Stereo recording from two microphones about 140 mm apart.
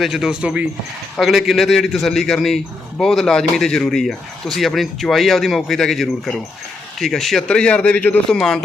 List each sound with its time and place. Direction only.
0.0 s speech: 5° right (ahead or behind)